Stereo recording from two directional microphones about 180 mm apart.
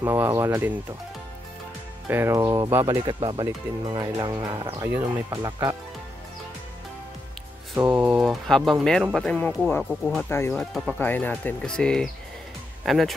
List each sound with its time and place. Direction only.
0.0 s speech: 15° right (ahead or behind)
2.0 s speech: 15° right (ahead or behind)
7.7 s speech: 10° right (ahead or behind)